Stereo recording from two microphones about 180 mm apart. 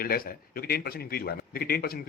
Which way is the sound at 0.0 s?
55° left (ahead or behind).